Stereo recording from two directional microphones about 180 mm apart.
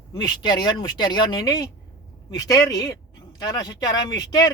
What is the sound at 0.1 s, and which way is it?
Speech, 25° left (ahead or behind).